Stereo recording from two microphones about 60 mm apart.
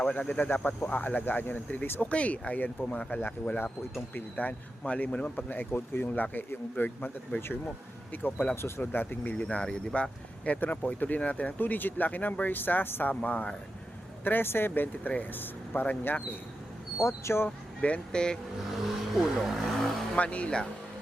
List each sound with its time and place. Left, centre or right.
0.0 s speech: left
8.1 s speech: left
8.6 s speech: left
14.3 s speech: left
17.0 s speech: left
17.7 s speech: centre
19.2 s speech: centre
20.1 s speech: left